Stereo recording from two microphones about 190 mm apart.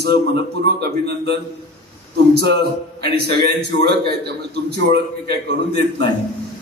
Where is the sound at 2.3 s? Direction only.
60° right (ahead or behind).